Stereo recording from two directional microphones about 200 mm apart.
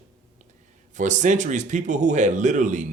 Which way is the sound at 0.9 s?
40° right (ahead or behind).